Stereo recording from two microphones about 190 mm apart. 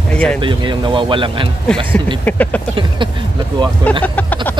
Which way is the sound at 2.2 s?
10° left (ahead or behind).